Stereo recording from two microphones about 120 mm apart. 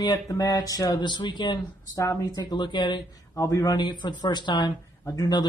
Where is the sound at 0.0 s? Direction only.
30° left (ahead or behind).